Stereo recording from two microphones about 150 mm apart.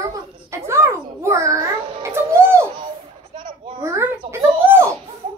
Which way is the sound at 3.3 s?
65° right (ahead or behind).